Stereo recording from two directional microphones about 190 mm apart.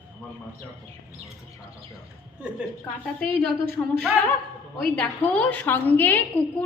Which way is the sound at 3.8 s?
20° left (ahead or behind).